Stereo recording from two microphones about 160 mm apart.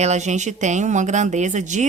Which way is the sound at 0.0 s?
45° right (ahead or behind).